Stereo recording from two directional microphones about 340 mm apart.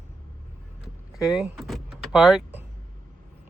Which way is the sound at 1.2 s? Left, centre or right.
Centre.